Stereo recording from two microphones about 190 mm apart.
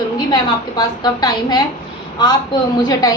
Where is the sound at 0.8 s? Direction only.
20° left (ahead or behind).